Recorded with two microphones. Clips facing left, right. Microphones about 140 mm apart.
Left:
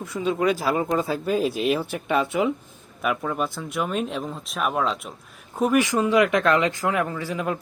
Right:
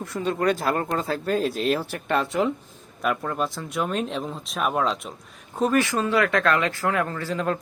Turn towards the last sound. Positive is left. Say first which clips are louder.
# right 1 dB
turn(degrees=10)  # may be behind; listen again after turning